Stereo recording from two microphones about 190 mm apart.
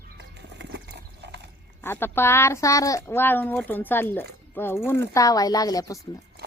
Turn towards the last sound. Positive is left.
turn(degrees=20)  # may be behind; listen again after turning